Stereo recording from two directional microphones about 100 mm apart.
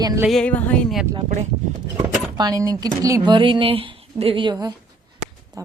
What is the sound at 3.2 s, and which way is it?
Speech, 55° right (ahead or behind).